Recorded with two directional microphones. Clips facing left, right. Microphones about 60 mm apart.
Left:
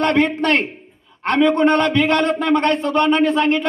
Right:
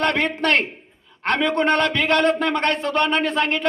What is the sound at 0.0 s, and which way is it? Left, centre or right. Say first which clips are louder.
Speech: left 4 dB; left.